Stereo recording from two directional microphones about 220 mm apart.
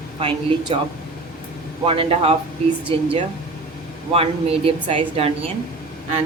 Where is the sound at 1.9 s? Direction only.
25° right (ahead or behind).